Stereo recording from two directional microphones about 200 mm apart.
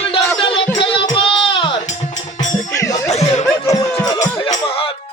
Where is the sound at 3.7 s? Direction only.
20° left (ahead or behind).